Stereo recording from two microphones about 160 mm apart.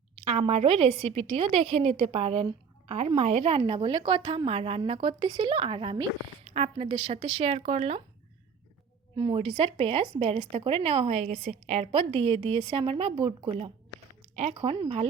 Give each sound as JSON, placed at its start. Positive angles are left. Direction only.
{"t": 0.3, "sound": "a woman's voice", "side_deg": -40}
{"t": 9.1, "sound": "a woman's voice", "side_deg": -35}
{"t": 14.5, "sound": "a woman's voice", "side_deg": -30}